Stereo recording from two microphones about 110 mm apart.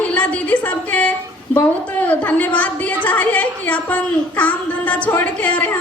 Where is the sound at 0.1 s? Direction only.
15° left (ahead or behind).